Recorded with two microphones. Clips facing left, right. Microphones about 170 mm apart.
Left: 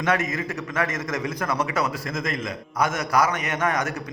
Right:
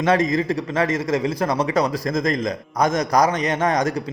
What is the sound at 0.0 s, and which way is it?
A man's voice, 30° right (ahead or behind).